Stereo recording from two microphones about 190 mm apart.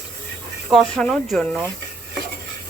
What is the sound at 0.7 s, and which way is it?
Speech, centre (ahead or behind).